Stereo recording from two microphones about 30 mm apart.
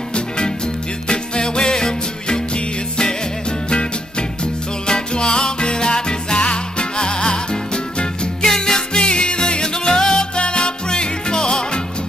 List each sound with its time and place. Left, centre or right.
1.0 s music: left
4.8 s music: left
9.0 s music: left